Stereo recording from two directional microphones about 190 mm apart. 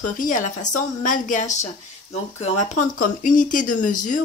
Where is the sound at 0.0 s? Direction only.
45° left (ahead or behind).